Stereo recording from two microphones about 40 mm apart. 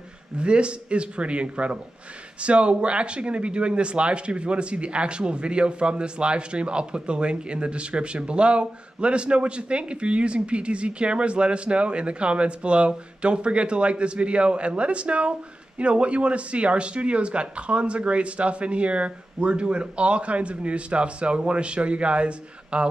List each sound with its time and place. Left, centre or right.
0.4 s speech: right